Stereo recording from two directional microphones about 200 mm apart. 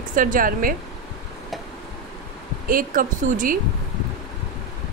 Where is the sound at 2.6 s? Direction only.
45° right (ahead or behind).